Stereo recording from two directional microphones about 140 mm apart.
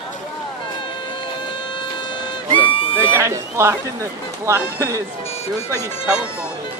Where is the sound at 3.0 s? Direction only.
20° right (ahead or behind).